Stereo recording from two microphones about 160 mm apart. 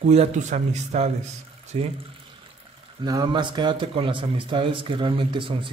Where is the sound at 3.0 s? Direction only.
25° right (ahead or behind).